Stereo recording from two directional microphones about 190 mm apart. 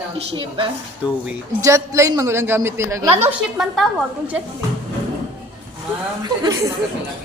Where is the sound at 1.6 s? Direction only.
15° right (ahead or behind).